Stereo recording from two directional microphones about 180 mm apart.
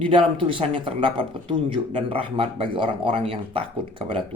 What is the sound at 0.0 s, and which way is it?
Speech, 30° right (ahead or behind).